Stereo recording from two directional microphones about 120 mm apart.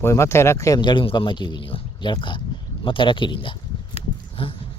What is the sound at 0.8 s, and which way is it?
Speech, 40° left (ahead or behind).